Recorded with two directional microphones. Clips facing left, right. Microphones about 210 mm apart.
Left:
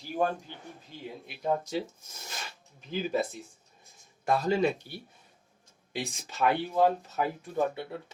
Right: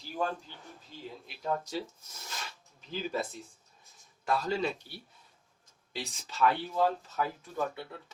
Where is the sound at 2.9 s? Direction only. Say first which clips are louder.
Left 4 dB; 50° left (ahead or behind).